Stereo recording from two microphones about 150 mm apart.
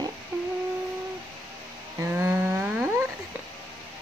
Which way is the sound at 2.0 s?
15° right (ahead or behind).